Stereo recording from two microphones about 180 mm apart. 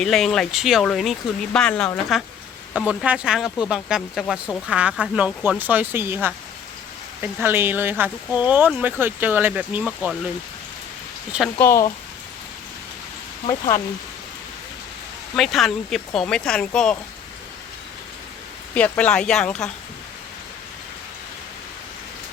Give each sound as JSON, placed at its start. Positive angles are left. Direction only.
{"t": 0.0, "sound": "speech", "side_deg": 0}
{"t": 11.3, "sound": "speech", "side_deg": -5}
{"t": 13.5, "sound": "speech", "side_deg": 15}
{"t": 15.4, "sound": "speech", "side_deg": 0}
{"t": 18.7, "sound": "speech", "side_deg": 10}